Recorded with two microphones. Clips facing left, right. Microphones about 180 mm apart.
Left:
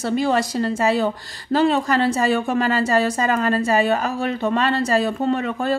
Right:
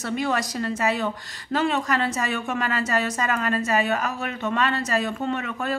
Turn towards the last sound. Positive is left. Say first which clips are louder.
# left 6 dB
turn(degrees=35)  # may be behind; listen again after turning